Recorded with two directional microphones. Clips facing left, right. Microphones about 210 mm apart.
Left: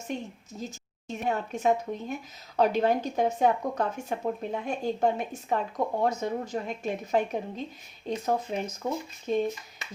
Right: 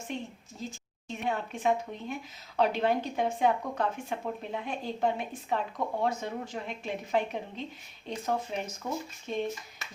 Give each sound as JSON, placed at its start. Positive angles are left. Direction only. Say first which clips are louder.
{"t": 0.1, "sound": "speech", "louder": "left 3 dB", "side_deg": 45}